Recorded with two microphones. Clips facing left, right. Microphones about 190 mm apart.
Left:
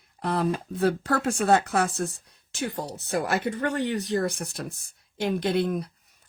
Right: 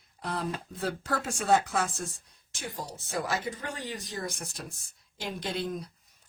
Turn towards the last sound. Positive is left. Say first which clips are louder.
# left 8 dB
turn(degrees=65)  # may be behind; listen again after turning